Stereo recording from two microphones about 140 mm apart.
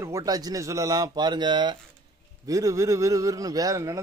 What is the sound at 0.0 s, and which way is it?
A man's voice, 25° right (ahead or behind).